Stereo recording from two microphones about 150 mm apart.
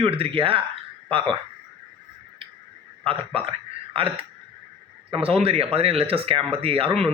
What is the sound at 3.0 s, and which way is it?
A man's voice, 40° right (ahead or behind).